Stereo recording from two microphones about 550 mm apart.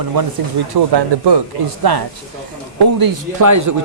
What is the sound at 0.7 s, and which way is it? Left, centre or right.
Speech, right.